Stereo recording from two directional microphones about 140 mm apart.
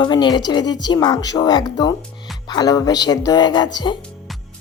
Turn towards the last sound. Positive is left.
turn(degrees=30)  # may be behind; listen again after turning